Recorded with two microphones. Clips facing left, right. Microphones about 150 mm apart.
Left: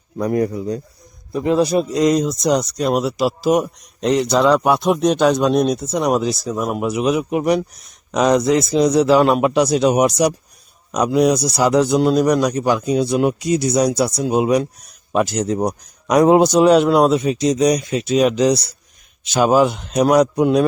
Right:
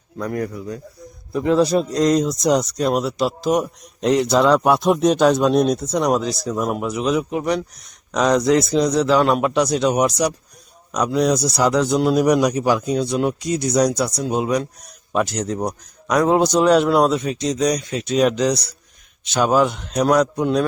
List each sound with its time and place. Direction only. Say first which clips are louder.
0.2 s a man's voice: left 6 dB; 25° left (ahead or behind)
16.5 s a man's voice: left 3 dB; 5° left (ahead or behind)